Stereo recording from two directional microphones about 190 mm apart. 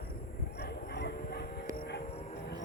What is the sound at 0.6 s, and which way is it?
Dog, 60° left (ahead or behind).